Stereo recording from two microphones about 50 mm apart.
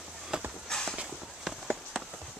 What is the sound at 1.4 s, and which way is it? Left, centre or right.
Run, centre.